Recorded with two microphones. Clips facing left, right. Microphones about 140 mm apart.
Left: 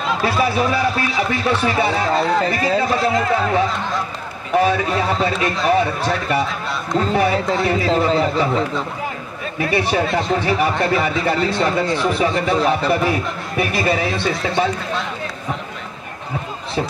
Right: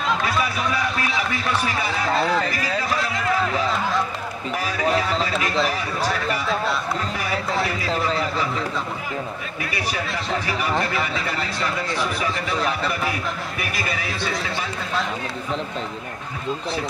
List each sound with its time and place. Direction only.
0.4 s speech: 30° left (ahead or behind)